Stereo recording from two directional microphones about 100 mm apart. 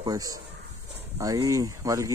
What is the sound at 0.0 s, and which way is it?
Speech, 35° right (ahead or behind).